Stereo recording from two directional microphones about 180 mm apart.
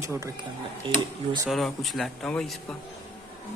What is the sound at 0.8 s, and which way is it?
Speech, 30° right (ahead or behind).